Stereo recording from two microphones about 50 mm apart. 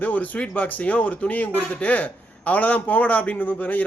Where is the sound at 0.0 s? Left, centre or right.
Left.